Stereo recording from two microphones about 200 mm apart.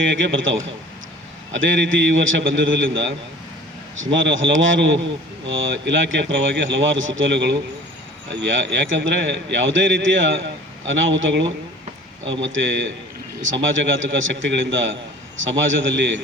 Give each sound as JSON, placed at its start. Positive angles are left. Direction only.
{"t": 0.2, "sound": "a man's voice", "side_deg": -70}
{"t": 13.4, "sound": "a man's voice", "side_deg": -70}